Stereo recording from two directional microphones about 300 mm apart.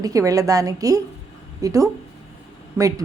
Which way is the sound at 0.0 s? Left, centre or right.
Centre.